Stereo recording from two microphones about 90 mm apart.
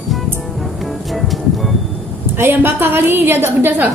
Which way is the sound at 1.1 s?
Centre (ahead or behind).